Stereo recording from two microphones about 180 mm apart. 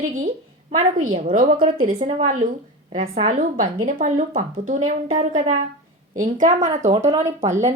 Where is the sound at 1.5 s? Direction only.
30° right (ahead or behind).